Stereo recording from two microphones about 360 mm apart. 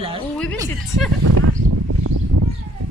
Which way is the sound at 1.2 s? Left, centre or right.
Right.